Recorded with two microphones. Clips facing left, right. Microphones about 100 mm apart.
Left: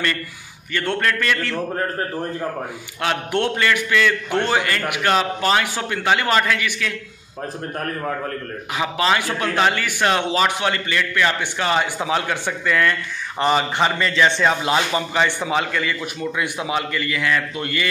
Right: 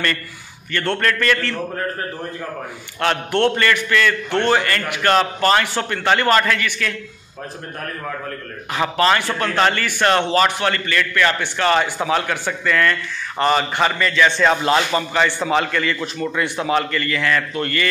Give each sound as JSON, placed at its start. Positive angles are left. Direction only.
{"t": 0.7, "sound": "a man's voice", "side_deg": 10}
{"t": 3.0, "sound": "a man's voice", "side_deg": 10}
{"t": 8.7, "sound": "a man's voice", "side_deg": 10}
{"t": 14.4, "sound": "a man's voice", "side_deg": 10}